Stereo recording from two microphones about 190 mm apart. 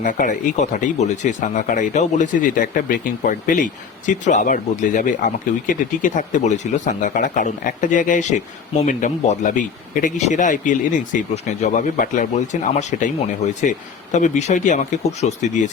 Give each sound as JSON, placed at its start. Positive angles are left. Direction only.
{"t": 0.0, "sound": "speech", "side_deg": 40}